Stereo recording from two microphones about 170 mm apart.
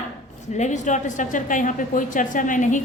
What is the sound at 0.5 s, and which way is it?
A woman's voice, 45° left (ahead or behind).